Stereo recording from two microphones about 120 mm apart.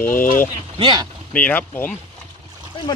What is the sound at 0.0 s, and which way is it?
Speech, 20° left (ahead or behind).